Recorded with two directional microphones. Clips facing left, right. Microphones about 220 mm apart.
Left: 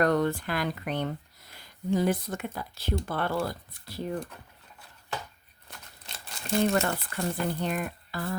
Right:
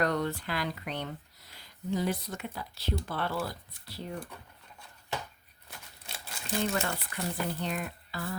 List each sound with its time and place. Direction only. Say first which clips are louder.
0.0 s speech: left 5 dB; 50° left (ahead or behind)
6.6 s speech: left 6 dB; 50° left (ahead or behind)